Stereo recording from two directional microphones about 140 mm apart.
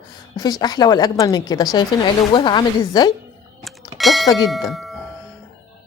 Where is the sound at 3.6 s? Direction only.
Centre (ahead or behind).